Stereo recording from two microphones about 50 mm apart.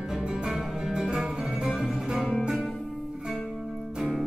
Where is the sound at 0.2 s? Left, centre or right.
Centre.